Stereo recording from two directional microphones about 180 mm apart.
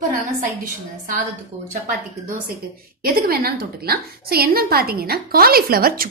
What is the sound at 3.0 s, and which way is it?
A woman's voice, 55° right (ahead or behind).